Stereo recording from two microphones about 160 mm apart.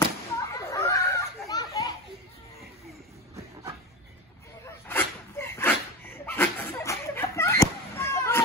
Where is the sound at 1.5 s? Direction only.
25° left (ahead or behind).